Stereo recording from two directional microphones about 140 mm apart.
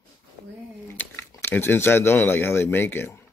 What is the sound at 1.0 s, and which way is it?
Speech, 15° left (ahead or behind).